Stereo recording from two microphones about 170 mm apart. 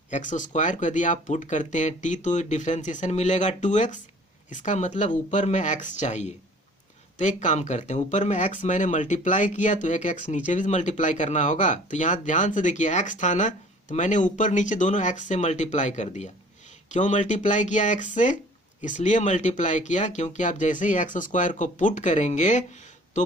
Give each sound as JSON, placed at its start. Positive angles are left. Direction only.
{"t": 0.1, "sound": "speech", "side_deg": 50}